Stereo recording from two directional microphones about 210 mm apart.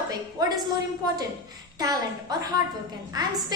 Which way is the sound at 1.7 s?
15° right (ahead or behind).